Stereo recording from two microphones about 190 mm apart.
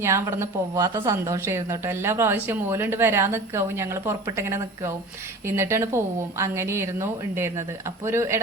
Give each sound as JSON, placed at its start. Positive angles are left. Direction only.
{"t": 0.0, "sound": "speech", "side_deg": -15}